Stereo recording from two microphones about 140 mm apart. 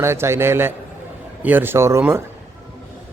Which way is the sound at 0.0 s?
20° right (ahead or behind).